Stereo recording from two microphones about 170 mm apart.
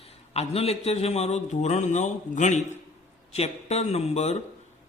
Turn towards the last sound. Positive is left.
turn(degrees=40)  # may be behind; listen again after turning